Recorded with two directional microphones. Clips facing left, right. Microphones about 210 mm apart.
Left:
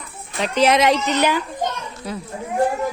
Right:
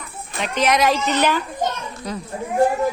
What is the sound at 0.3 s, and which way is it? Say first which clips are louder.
Speech: left 3 dB; 30° left (ahead or behind).